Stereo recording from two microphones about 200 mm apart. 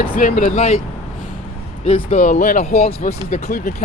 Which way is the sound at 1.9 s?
35° left (ahead or behind).